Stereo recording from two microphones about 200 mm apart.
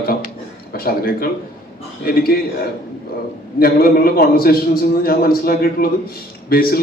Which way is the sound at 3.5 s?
50° left (ahead or behind).